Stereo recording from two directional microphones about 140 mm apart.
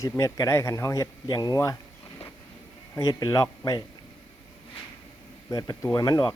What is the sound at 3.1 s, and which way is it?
Speech, 25° left (ahead or behind).